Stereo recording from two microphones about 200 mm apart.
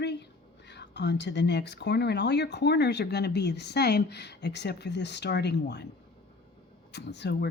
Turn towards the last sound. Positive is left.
turn(degrees=60)  # may be behind; listen again after turning